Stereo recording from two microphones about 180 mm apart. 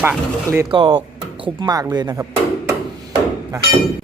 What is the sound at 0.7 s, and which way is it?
Speech, 25° right (ahead or behind).